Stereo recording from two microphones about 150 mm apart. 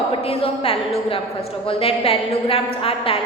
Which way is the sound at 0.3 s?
40° left (ahead or behind).